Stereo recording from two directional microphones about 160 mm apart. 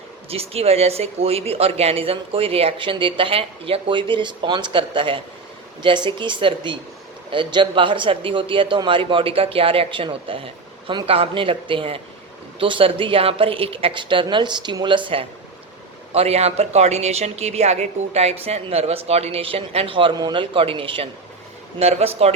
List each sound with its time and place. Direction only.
0.3 s speech: 40° right (ahead or behind)